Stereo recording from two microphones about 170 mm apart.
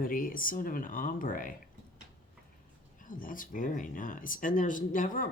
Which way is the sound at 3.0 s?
55° left (ahead or behind).